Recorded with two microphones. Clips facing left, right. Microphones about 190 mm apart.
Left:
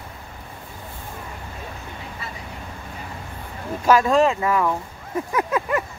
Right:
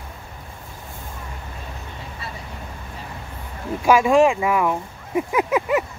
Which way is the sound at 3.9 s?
15° right (ahead or behind).